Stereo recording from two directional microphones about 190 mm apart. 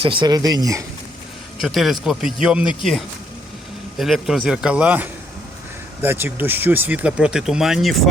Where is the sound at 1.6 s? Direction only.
Centre (ahead or behind).